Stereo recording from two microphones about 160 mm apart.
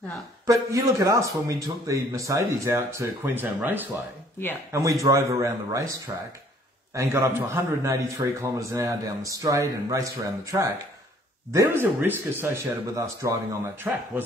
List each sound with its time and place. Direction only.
0.5 s a man's voice: 20° right (ahead or behind)